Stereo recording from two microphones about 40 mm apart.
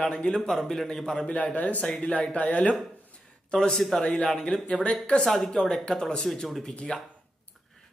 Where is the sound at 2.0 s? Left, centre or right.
Left.